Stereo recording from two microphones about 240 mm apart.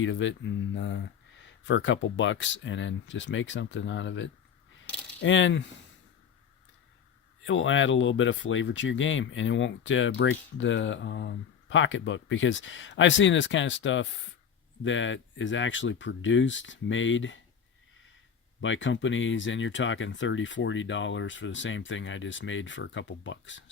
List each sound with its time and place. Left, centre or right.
0.0 s speech: left
7.4 s speech: left
18.6 s speech: left